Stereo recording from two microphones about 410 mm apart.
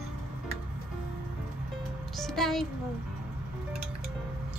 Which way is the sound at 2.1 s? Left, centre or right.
Centre.